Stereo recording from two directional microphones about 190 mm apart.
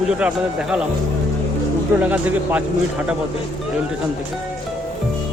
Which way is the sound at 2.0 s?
10° right (ahead or behind).